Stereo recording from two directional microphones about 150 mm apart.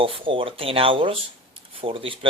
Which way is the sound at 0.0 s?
35° right (ahead or behind).